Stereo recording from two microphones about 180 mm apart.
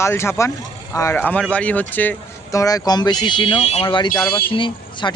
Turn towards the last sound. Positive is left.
turn(degrees=25)  # may be behind; listen again after turning